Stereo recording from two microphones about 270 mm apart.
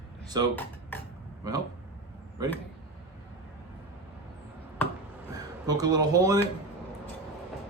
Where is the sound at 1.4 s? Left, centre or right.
Centre.